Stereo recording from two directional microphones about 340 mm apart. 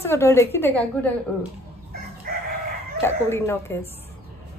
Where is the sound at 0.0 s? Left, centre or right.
Centre.